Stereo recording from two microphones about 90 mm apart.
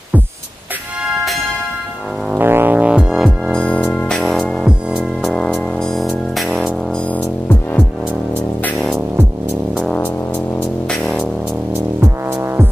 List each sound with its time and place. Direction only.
2.3 s music: 25° right (ahead or behind); by 3.5 s centre (ahead or behind)
3.5 s music: 10° left (ahead or behind)
4.6 s music: 10° right (ahead or behind)
5.3 s music: 5° left (ahead or behind)
8.7 s music: centre (ahead or behind)
9.9 s music: 20° left (ahead or behind)
10.9 s music: centre (ahead or behind)
12.0 s music: 30° right (ahead or behind)